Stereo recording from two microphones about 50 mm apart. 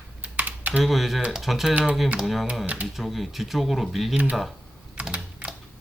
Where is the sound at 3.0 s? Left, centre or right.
Centre.